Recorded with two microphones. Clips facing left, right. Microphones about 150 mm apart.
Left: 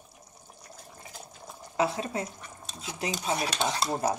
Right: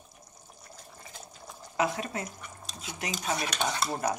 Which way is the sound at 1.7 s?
30° left (ahead or behind).